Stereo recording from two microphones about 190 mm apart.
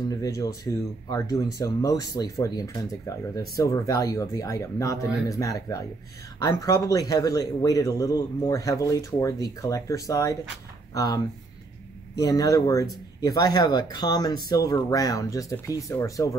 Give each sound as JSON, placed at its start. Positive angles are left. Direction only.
{"t": 0.1, "sound": "speech", "side_deg": 20}